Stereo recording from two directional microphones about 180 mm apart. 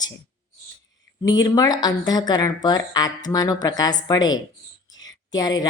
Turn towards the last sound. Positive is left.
turn(degrees=20)  # may be behind; listen again after turning